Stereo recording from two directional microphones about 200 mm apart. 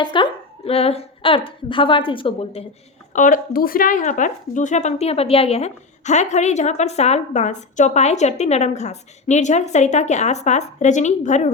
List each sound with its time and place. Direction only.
0.0 s a woman's voice: 25° left (ahead or behind)
3.1 s speech: 40° left (ahead or behind)